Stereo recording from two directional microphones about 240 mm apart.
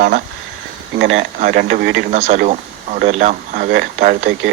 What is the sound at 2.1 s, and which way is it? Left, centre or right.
Speech, right.